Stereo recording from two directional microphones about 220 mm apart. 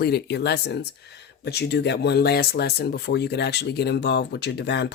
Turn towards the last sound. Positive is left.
turn(degrees=50)  # may be behind; listen again after turning